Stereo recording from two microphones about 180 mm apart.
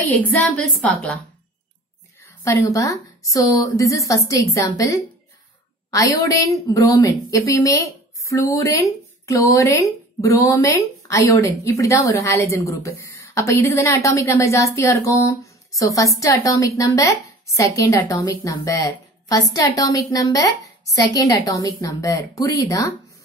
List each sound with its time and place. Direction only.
0.3 s a woman's voice: 5° left (ahead or behind)
2.4 s a woman's voice: 15° left (ahead or behind)